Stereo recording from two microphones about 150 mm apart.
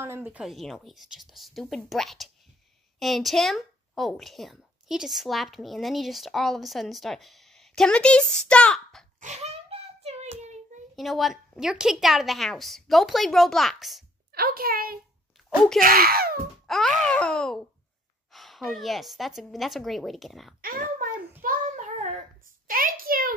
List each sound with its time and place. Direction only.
0.0 s a woman's voice: 15° right (ahead or behind); by 9.0 s 5° left (ahead or behind)
9.2 s child singing: 50° right (ahead or behind)
11.0 s a woman's voice: centre (ahead or behind)
14.3 s a woman's voice: 85° right
15.3 s a sound: centre (ahead or behind)
15.8 s a woman's voice: 85° right
16.6 s groan: centre (ahead or behind)
17.0 s a woman's voice: 5° left (ahead or behind)
21.4 s child singing: 60° right (ahead or behind)
22.7 s a sound: 70° right (ahead or behind)